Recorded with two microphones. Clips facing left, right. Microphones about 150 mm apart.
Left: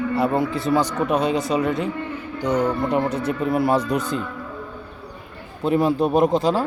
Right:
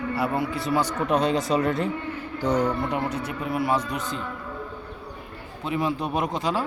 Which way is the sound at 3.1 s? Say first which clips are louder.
Left 6 dB; 90° left.